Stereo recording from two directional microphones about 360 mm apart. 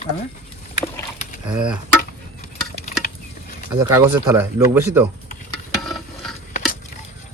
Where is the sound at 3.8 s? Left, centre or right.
Centre.